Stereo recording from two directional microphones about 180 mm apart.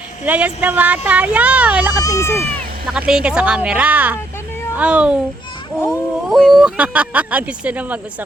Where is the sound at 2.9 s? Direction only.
5° right (ahead or behind).